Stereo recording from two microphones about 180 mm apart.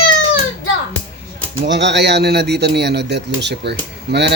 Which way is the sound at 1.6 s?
80° right.